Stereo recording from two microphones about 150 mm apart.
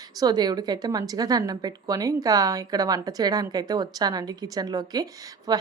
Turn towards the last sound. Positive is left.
turn(degrees=-25)  # may be behind; listen again after turning